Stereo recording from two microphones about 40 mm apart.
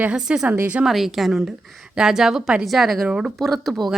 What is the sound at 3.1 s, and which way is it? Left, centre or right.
Speech, right.